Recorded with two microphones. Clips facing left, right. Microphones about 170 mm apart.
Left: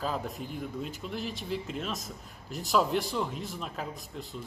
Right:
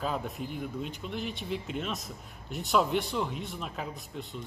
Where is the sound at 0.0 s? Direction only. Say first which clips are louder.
Even; centre (ahead or behind).